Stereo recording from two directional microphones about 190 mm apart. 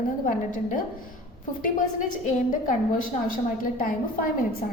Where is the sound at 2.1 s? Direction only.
45° left (ahead or behind).